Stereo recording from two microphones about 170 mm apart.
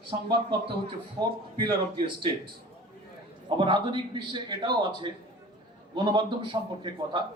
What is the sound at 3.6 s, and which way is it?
A man's voice, 30° right (ahead or behind).